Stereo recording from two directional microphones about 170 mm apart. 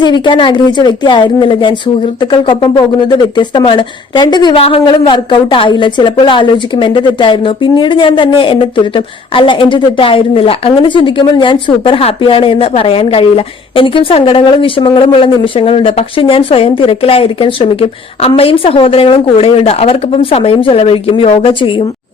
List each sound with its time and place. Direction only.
0.0 s a woman's voice: 25° left (ahead or behind)